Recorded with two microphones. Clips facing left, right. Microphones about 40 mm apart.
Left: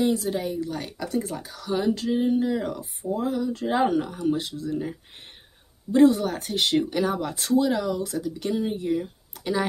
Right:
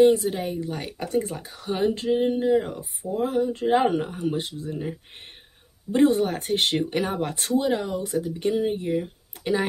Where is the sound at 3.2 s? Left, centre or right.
Right.